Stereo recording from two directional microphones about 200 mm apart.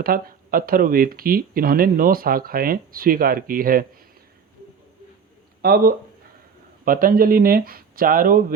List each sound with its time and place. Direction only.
0.0 s speech: 45° right (ahead or behind)
5.6 s speech: 45° right (ahead or behind)